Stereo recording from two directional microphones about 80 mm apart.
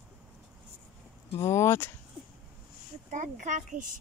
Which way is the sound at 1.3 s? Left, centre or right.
Left.